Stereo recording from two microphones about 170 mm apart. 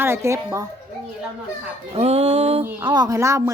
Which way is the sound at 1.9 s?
40° right (ahead or behind).